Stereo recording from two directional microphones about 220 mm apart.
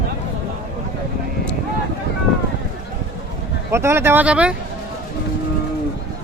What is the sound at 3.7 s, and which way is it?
Speech, 10° right (ahead or behind).